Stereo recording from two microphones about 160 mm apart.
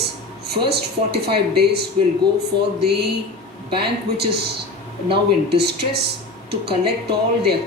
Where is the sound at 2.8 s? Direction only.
90° right.